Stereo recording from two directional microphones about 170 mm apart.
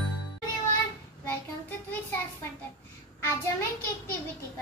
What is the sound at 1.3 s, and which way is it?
Child singing, 15° left (ahead or behind).